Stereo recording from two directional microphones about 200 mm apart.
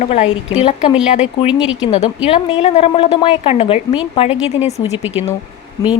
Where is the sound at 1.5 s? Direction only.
5° right (ahead or behind).